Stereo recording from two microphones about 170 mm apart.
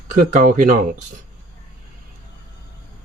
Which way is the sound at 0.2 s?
50° right (ahead or behind).